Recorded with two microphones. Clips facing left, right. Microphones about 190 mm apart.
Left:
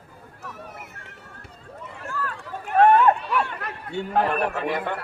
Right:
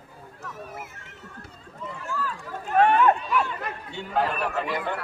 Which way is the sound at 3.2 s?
60° left (ahead or behind).